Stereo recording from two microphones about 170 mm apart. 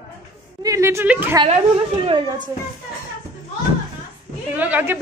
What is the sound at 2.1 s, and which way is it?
Speech, 30° right (ahead or behind).